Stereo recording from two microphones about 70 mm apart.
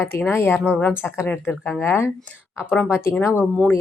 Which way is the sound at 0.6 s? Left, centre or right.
Centre.